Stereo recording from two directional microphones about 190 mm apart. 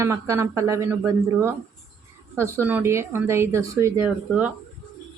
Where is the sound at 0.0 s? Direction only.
15° right (ahead or behind).